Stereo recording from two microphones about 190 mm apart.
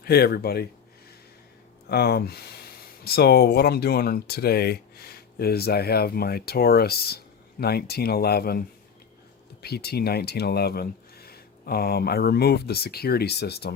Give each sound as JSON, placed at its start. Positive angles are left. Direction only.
{"t": 0.0, "sound": "speech", "side_deg": 55}
{"t": 1.9, "sound": "speech", "side_deg": 55}